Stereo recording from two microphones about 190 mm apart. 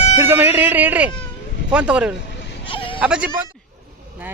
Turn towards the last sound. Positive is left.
turn(degrees=-5)  # may be behind; listen again after turning